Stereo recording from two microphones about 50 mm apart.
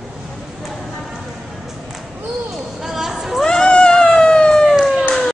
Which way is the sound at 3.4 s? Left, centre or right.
Centre.